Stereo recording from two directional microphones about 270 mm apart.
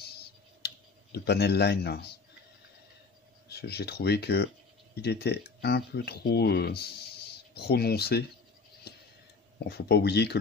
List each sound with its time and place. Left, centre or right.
0.0 s clicking: left
1.1 s speech: left
3.4 s speech: left
9.7 s speech: left